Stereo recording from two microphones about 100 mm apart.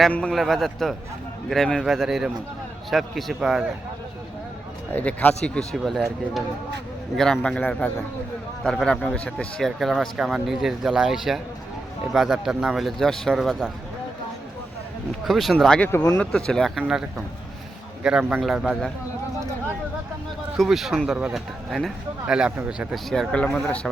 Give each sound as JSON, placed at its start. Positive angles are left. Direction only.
{"t": 0.1, "sound": "speech", "side_deg": 10}
{"t": 4.9, "sound": "speech", "side_deg": 15}
{"t": 5.5, "sound": "speech", "side_deg": 0}
{"t": 9.1, "sound": "speech", "side_deg": 10}
{"t": 15.2, "sound": "speech", "side_deg": 0}
{"t": 18.0, "sound": "speech", "side_deg": -10}
{"t": 20.6, "sound": "speech", "side_deg": 0}
{"t": 23.0, "sound": "speech", "side_deg": 5}